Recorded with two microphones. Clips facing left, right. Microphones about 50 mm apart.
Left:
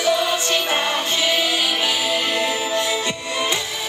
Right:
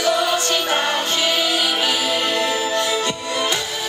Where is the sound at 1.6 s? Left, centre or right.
Right.